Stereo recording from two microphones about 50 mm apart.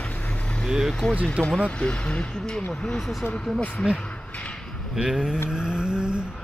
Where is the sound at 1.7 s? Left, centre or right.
Left.